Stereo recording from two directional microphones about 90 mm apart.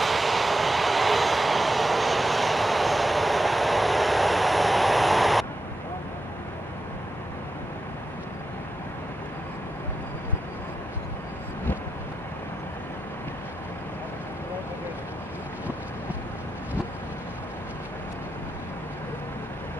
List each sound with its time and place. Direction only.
0.0 s vehicle: centre (ahead or behind)